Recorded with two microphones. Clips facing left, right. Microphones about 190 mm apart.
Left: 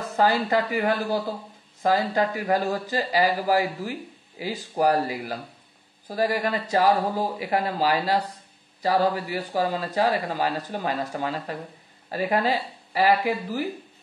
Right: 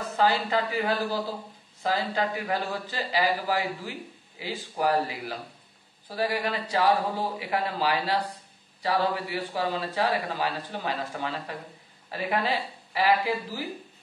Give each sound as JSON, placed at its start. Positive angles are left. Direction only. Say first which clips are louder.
{"t": 0.2, "sound": "a man's voice", "louder": "left 3 dB", "side_deg": 50}
{"t": 6.0, "sound": "a man's voice", "louder": "left 4 dB", "side_deg": 45}